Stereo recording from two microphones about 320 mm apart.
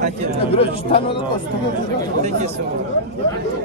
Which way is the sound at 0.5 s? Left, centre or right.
Centre.